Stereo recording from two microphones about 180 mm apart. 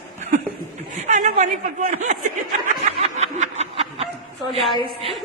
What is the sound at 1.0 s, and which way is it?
Speech, 40° right (ahead or behind).